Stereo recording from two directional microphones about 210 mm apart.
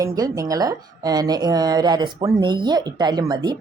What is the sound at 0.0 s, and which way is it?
Speech, 15° right (ahead or behind).